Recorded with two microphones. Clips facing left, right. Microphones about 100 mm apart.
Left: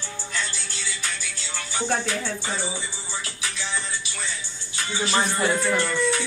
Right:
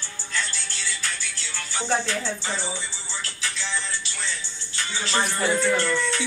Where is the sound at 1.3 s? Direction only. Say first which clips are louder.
Left 1 dB; 15° left (ahead or behind).